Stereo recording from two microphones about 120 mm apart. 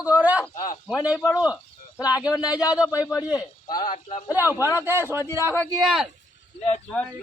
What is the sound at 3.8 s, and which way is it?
Speech, 75° left (ahead or behind).